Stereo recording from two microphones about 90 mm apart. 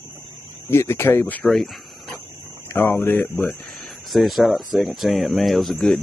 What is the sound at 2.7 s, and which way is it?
Speech, 20° left (ahead or behind).